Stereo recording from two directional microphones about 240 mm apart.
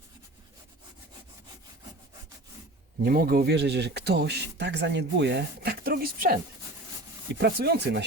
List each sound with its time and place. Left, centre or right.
3.0 s speech: right